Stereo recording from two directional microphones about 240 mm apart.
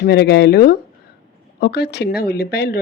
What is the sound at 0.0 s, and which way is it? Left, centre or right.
A woman's voice, left.